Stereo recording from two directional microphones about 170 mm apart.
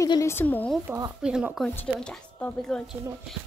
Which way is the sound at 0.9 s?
20° right (ahead or behind).